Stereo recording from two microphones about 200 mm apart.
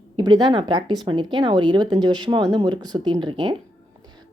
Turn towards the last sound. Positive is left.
turn(degrees=-25)  # may be behind; listen again after turning